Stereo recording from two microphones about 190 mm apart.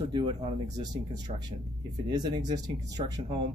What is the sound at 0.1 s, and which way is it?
Speech, 20° right (ahead or behind).